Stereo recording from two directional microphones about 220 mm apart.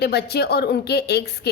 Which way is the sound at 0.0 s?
50° left (ahead or behind).